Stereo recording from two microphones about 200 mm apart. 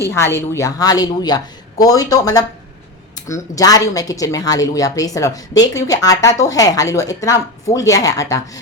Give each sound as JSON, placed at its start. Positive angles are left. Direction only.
{"t": 0.1, "sound": "speech", "side_deg": 10}